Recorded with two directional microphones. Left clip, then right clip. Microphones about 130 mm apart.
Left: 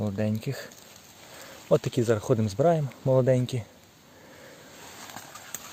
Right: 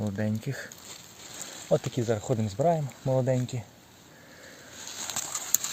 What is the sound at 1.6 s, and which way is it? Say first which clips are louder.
Speech: left 3 dB; 45° left (ahead or behind).